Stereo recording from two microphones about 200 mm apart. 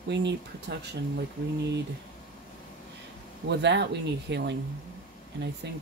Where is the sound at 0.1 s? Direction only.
60° right (ahead or behind).